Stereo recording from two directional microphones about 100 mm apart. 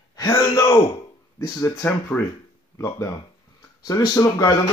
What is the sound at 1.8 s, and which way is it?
Speech, 20° left (ahead or behind).